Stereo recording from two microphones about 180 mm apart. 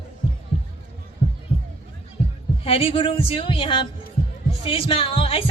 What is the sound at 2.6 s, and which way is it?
Speech, 30° left (ahead or behind).